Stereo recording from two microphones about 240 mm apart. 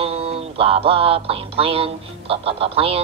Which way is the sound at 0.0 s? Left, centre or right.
Right.